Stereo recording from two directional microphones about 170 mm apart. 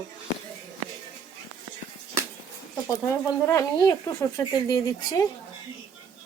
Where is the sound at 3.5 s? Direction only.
15° left (ahead or behind).